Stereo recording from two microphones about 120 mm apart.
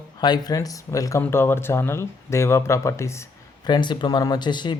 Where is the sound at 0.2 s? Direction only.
35° left (ahead or behind).